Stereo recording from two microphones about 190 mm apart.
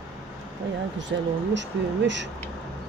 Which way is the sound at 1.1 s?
65° right (ahead or behind).